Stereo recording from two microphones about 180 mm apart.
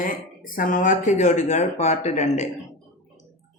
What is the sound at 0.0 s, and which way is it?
A man's voice, 50° left (ahead or behind).